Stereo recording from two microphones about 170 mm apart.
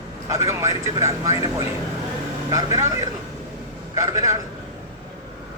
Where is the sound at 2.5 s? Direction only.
20° right (ahead or behind).